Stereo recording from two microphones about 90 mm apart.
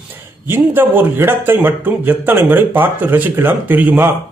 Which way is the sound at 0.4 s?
25° right (ahead or behind).